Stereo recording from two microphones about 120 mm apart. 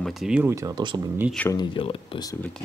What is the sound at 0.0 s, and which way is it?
Speech, centre (ahead or behind).